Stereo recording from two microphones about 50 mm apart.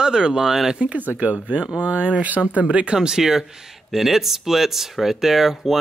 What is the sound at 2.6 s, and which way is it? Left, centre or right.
Speech, right.